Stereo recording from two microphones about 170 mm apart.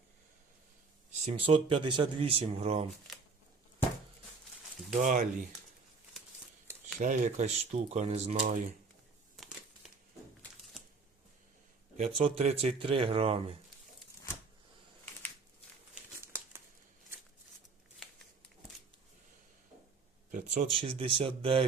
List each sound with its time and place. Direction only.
1.1 s speech: 40° right (ahead or behind)
4.9 s speech: 50° right (ahead or behind)
7.0 s speech: 45° right (ahead or behind)
9.3 s crumpling: centre (ahead or behind)
12.0 s speech: 35° right (ahead or behind)
16.2 s crumpling: 15° right (ahead or behind)
20.3 s a sound: 50° right (ahead or behind)
20.7 s speech: 30° right (ahead or behind)